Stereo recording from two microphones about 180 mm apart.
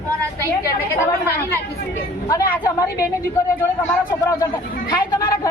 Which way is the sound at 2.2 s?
20° left (ahead or behind).